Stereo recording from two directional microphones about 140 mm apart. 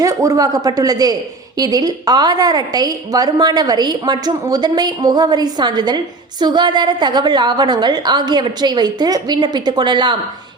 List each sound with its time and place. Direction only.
0.0 s a woman's voice: 25° right (ahead or behind)